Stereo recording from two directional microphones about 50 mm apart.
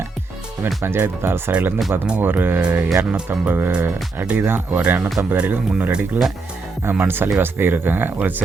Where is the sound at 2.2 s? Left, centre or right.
Right.